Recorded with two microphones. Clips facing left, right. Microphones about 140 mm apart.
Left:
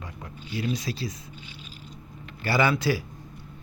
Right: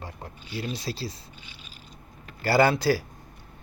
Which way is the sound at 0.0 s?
35° right (ahead or behind).